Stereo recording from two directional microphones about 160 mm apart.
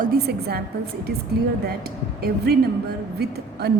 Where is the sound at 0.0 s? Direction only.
75° right (ahead or behind).